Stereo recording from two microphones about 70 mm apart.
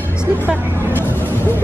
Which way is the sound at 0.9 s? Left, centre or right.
Left.